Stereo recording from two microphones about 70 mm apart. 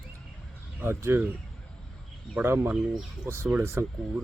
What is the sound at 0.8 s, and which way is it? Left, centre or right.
Speech, right.